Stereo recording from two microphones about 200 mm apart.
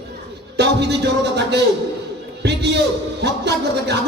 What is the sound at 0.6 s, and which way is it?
A man's voice, 55° right (ahead or behind).